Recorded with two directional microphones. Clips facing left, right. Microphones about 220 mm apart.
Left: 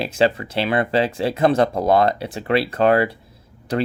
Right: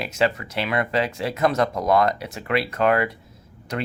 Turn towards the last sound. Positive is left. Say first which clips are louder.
# left 7 dB
turn(degrees=30)  # may be behind; listen again after turning